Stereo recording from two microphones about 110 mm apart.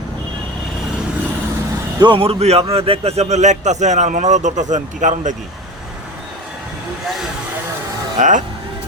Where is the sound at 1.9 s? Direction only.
45° right (ahead or behind); by 5.4 s 90° right.